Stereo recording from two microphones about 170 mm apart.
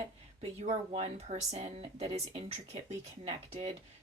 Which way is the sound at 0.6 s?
40° right (ahead or behind).